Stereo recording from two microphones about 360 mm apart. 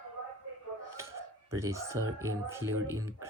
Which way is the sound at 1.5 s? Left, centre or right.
Centre.